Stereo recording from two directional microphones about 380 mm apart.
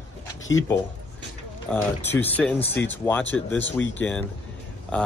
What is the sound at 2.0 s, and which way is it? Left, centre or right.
Speech, centre.